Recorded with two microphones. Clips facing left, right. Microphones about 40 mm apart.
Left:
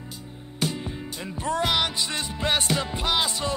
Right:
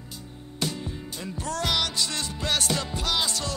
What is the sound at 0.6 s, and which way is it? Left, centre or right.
Music, left.